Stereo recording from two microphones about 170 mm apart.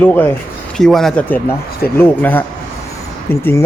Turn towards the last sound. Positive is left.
turn(degrees=15)  # may be behind; listen again after turning